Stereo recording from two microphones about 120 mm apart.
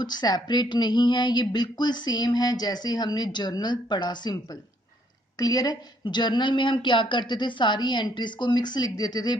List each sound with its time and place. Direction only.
0.0 s speech: 35° left (ahead or behind)